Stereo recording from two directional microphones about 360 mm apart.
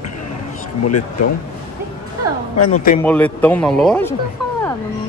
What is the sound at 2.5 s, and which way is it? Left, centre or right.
Speech, left.